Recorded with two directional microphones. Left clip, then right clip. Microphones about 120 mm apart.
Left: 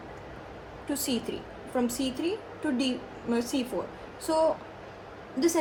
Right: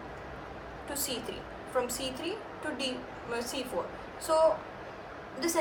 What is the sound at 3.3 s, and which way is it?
A woman's voice, 65° left (ahead or behind).